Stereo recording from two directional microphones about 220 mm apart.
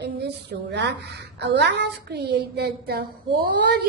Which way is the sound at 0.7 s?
50° right (ahead or behind).